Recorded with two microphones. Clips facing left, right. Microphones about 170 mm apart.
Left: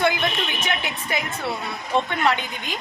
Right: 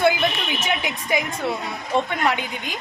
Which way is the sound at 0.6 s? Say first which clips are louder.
Right 2 dB; 10° right (ahead or behind).